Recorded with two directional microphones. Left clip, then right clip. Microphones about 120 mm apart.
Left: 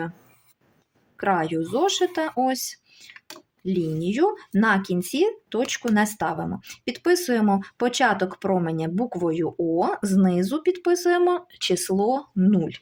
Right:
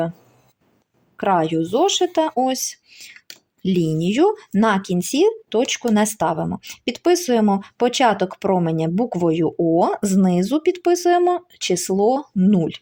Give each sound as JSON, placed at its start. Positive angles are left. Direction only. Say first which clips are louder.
{"t": 1.1, "sound": "speech", "louder": "right 5 dB", "side_deg": -40}
{"t": 3.6, "sound": "speech", "louder": "right 5 dB", "side_deg": -70}
{"t": 11.2, "sound": "speech", "louder": "right 3 dB", "side_deg": -25}